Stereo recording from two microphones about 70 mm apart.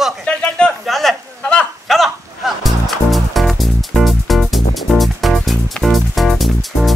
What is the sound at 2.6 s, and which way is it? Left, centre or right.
Music, centre.